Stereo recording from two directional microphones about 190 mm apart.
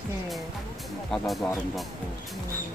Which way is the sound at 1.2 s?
Centre (ahead or behind).